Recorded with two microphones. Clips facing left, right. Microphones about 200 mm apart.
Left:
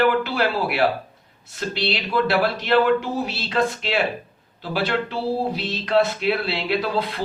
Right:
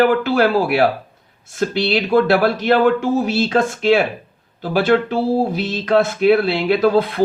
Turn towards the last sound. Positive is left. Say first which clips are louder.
# right 8 dB
turn(degrees=-50)  # may be behind; listen again after turning